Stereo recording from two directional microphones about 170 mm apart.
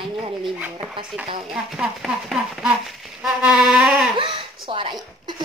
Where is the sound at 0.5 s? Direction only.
10° right (ahead or behind).